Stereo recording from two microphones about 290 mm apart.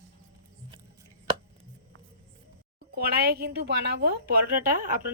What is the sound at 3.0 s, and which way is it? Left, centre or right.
A woman's voice, right.